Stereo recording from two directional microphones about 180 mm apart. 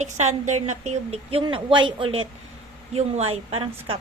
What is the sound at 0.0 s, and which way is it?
A woman's voice, 40° right (ahead or behind).